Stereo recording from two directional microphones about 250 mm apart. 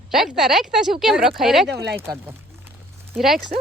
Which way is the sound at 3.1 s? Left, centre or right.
Centre.